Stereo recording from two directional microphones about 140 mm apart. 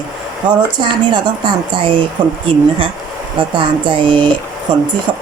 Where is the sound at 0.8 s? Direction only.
35° right (ahead or behind).